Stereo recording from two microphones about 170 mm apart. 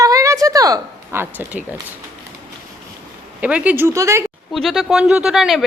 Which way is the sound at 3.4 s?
10° right (ahead or behind).